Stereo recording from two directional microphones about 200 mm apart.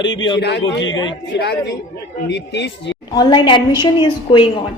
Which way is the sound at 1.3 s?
60° left (ahead or behind).